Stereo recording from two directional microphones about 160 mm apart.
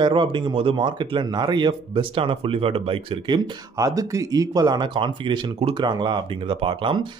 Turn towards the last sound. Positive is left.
turn(degrees=-30)  # may be behind; listen again after turning